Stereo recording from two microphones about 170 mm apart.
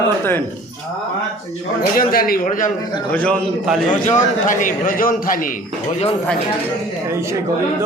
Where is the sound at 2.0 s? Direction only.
60° left (ahead or behind).